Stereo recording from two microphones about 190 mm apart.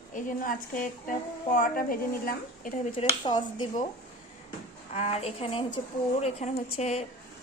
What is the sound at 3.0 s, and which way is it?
Speech, 35° left (ahead or behind).